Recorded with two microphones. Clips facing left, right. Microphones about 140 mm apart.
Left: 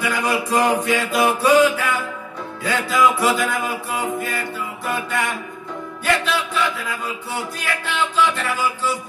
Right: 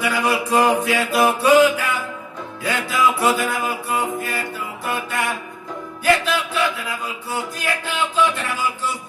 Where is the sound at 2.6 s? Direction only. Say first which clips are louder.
Left 2 dB; centre (ahead or behind).